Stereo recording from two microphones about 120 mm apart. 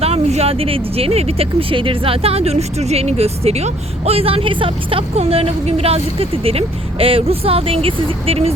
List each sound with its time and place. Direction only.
0.0 s speech: 65° right (ahead or behind)